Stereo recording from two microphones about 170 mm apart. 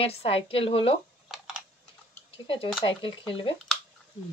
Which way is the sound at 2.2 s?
30° left (ahead or behind).